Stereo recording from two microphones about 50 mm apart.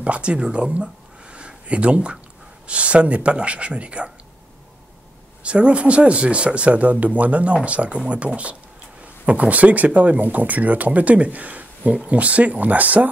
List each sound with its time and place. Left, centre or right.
0.0 s speech: right
1.3 s a sound: right
2.6 s speech: right
5.4 s speech: right
9.0 s speech: right